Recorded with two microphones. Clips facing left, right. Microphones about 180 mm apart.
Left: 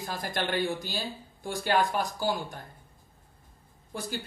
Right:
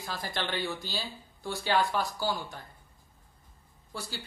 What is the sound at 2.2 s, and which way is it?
Speech, 50° left (ahead or behind).